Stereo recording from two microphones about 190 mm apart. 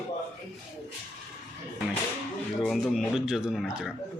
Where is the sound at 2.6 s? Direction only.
Centre (ahead or behind).